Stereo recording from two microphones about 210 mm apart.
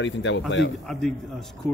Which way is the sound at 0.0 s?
60° left (ahead or behind).